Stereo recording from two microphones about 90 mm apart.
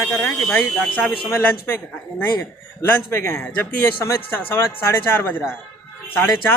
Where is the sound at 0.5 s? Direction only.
20° left (ahead or behind).